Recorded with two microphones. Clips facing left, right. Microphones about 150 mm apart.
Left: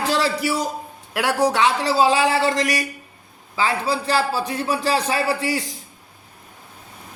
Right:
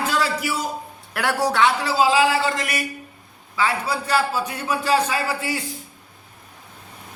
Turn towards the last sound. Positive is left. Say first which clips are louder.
# left 3 dB
turn(degrees=35)  # may be behind; listen again after turning